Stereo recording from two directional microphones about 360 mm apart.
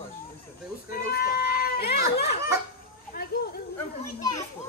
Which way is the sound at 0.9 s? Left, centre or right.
Left.